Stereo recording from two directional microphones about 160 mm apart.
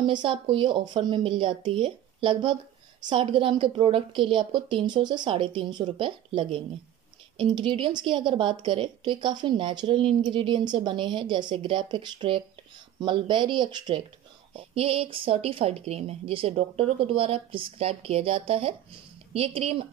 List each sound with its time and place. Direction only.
0.0 s a woman's voice: 30° right (ahead or behind)